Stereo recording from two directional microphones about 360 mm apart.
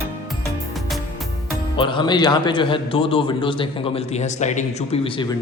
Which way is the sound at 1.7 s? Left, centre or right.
Centre.